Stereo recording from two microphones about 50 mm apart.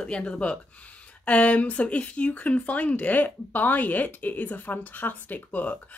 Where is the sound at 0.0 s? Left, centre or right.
Centre.